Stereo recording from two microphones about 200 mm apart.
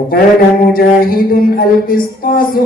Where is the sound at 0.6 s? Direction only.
50° left (ahead or behind).